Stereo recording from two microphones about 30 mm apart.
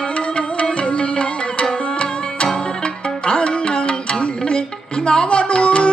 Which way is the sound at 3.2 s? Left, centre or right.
Left.